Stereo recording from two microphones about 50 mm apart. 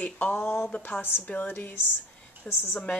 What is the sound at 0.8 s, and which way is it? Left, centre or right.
Speech, left.